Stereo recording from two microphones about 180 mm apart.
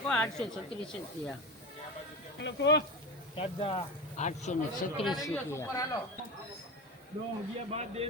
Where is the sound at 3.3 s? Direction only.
30° left (ahead or behind).